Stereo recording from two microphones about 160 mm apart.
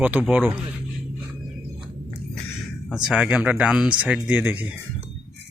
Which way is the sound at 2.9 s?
5° right (ahead or behind).